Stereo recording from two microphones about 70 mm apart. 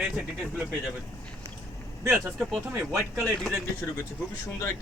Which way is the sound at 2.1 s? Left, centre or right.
Centre.